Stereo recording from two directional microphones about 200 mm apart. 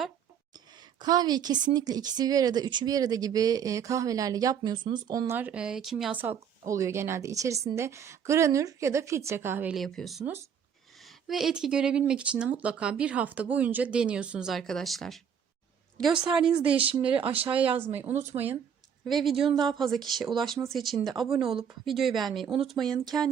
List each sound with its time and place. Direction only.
0.5 s speech: 20° right (ahead or behind); by 16.7 s 5° right (ahead or behind)
16.7 s speech: 25° right (ahead or behind)
19.0 s speech: centre (ahead or behind)